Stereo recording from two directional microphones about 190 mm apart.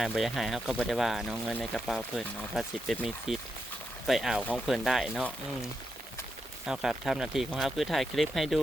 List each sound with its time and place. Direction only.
0.0 s speech: centre (ahead or behind)
6.7 s speech: centre (ahead or behind)